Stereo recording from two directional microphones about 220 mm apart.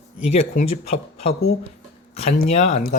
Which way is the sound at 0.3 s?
30° left (ahead or behind).